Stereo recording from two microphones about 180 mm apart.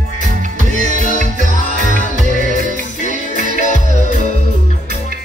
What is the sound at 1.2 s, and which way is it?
Music, 45° right (ahead or behind).